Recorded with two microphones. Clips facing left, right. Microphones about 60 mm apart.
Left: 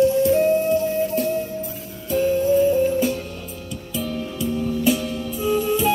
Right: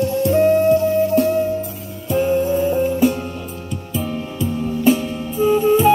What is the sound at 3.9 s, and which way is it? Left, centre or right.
Music, right.